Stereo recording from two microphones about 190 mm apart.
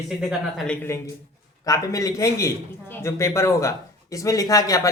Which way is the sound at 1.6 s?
20° left (ahead or behind).